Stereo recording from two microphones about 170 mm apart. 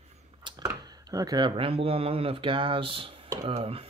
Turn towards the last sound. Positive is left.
turn(degrees=-35)  # may be behind; listen again after turning